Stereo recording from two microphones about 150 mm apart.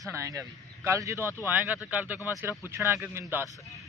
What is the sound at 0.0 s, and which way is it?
Speech, 20° right (ahead or behind).